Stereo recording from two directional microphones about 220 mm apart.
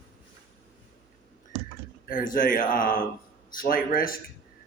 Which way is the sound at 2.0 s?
40° left (ahead or behind).